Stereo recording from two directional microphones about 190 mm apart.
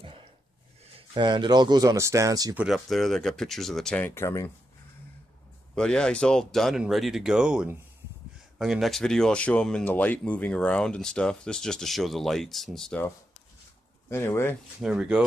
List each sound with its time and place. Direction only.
0.0 s a sound: 30° right (ahead or behind)
0.8 s speech: 30° right (ahead or behind)
2.5 s speech: 5° right (ahead or behind); by 4.5 s 15° left (ahead or behind)
5.8 s speech: 5° left (ahead or behind)
14.8 s speech: 5° right (ahead or behind)